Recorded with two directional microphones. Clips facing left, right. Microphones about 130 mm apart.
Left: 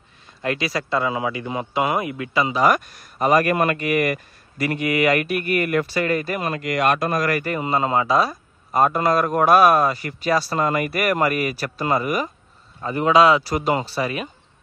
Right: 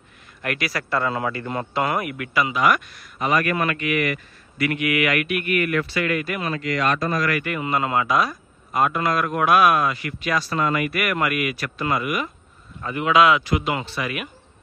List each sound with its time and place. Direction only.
0.4 s a man's voice: 25° left (ahead or behind)